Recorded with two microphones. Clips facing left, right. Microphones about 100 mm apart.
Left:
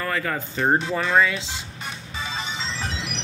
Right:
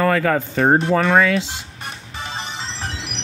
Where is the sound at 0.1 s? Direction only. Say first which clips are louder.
Right 8 dB; 90° right.